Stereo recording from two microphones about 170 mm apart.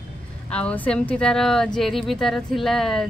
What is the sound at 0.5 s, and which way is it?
Speech, 5° left (ahead or behind).